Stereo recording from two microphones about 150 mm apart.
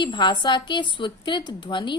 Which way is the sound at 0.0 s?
30° left (ahead or behind).